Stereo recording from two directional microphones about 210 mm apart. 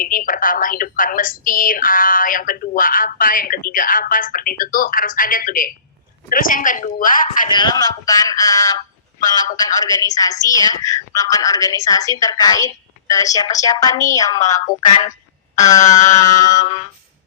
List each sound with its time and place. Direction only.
0.0 s a woman's voice: 40° left (ahead or behind)
7.4 s a woman's voice: 20° left (ahead or behind)
15.8 s a woman's voice: 35° left (ahead or behind)
16.3 s a woman's voice: 15° left (ahead or behind)